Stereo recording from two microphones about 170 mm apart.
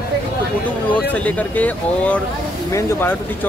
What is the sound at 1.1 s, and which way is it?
Speech, 10° left (ahead or behind).